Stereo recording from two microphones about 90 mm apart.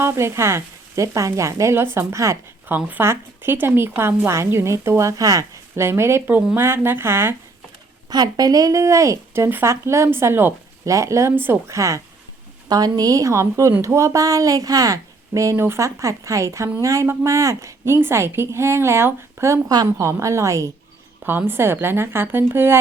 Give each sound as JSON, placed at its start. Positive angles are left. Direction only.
{"t": 0.0, "sound": "speech", "side_deg": -30}
{"t": 2.6, "sound": "speech", "side_deg": -20}
{"t": 8.1, "sound": "speech", "side_deg": -45}
{"t": 11.8, "sound": "speech", "side_deg": -35}
{"t": 21.2, "sound": "speech", "side_deg": -25}